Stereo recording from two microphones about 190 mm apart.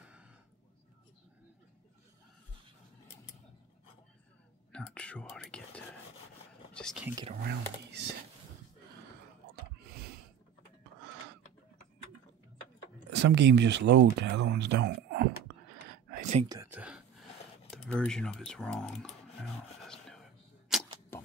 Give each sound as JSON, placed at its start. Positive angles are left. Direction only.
{"t": 0.0, "sound": "a sound", "side_deg": -5}
{"t": 4.7, "sound": "whispering", "side_deg": 5}
{"t": 6.7, "sound": "speech", "side_deg": 5}
{"t": 7.4, "sound": "speech", "side_deg": -60}
{"t": 13.1, "sound": "speech", "side_deg": -65}
{"t": 15.9, "sound": "whispering", "side_deg": -45}
{"t": 16.6, "sound": "whispering", "side_deg": -5}
{"t": 17.6, "sound": "speech", "side_deg": 5}
{"t": 20.7, "sound": "a sound", "side_deg": -5}
{"t": 21.1, "sound": "a sound", "side_deg": 10}